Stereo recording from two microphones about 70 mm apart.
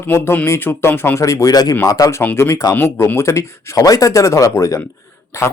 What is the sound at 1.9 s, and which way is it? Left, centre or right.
Speech, left.